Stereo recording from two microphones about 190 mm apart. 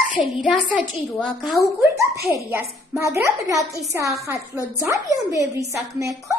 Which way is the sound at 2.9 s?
15° right (ahead or behind).